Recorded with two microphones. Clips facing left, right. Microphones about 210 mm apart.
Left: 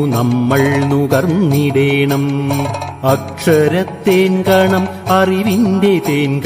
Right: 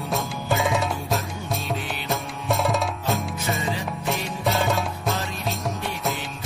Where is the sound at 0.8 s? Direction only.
75° left (ahead or behind).